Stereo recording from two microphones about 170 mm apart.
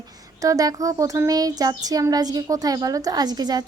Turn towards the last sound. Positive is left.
turn(degrees=-25)  # may be behind; listen again after turning